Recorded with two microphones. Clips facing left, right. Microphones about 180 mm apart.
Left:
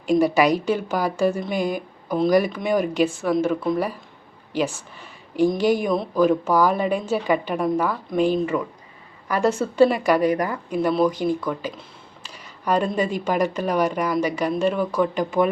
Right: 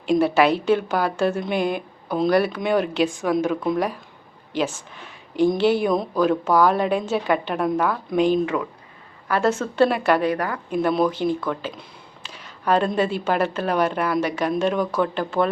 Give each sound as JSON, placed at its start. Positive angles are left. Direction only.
{"t": 0.2, "sound": "speech", "side_deg": 10}
{"t": 1.5, "sound": "speech", "side_deg": -65}
{"t": 2.0, "sound": "speech", "side_deg": 10}
{"t": 9.3, "sound": "speech", "side_deg": 10}
{"t": 12.4, "sound": "a sound", "side_deg": 10}
{"t": 13.0, "sound": "speech", "side_deg": 10}